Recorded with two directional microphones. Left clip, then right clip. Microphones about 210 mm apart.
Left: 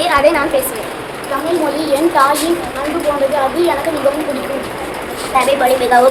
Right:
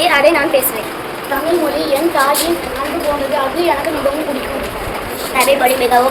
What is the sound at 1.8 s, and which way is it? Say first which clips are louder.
Speech: left 1 dB; 20° left (ahead or behind).